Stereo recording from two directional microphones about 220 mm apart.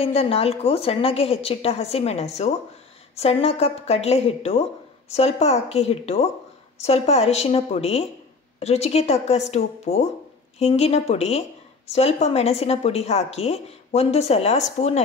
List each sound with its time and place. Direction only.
0.0 s a woman's voice: 25° left (ahead or behind)